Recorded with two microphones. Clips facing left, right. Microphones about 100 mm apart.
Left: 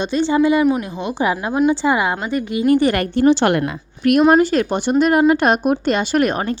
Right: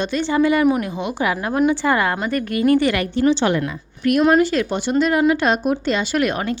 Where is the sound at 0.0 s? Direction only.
25° left (ahead or behind).